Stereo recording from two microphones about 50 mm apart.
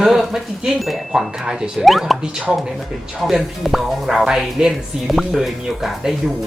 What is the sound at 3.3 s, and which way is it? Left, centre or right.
Speech, centre.